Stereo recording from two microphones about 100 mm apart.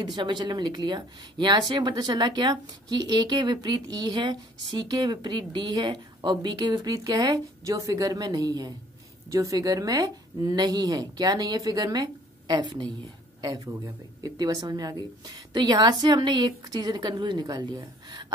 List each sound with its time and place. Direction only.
0.0 s speech: 45° right (ahead or behind)
13.4 s speech: 35° right (ahead or behind)